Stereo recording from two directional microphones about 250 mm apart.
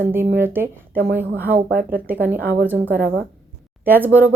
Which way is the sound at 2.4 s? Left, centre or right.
Right.